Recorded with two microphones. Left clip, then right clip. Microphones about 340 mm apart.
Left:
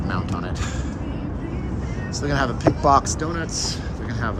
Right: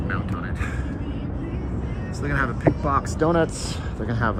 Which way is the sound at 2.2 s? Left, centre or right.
Centre.